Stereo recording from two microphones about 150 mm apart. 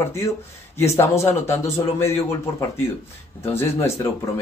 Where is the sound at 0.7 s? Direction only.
20° left (ahead or behind).